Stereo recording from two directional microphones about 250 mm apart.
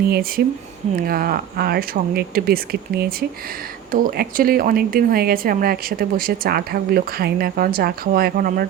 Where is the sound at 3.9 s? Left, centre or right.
Right.